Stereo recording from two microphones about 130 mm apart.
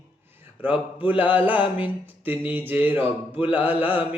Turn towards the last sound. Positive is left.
turn(degrees=-15)  # may be behind; listen again after turning